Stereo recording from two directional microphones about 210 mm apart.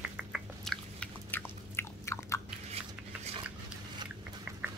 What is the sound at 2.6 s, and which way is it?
Shuffling cards, 30° right (ahead or behind).